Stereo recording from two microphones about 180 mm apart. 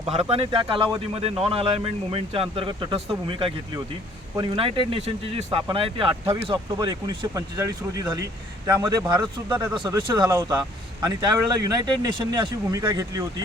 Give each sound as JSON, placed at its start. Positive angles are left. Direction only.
{"t": 0.0, "sound": "speech", "side_deg": -35}